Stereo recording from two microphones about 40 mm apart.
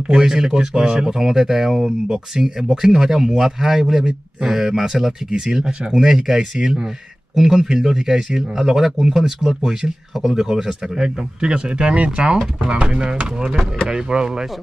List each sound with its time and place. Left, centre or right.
0.1 s speech: centre
11.4 s speech: right